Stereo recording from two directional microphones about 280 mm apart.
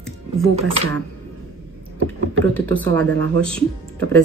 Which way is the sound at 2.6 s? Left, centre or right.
Centre.